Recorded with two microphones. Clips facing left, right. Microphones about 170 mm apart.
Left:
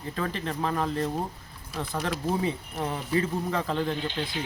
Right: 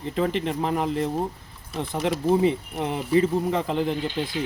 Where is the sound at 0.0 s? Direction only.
20° right (ahead or behind).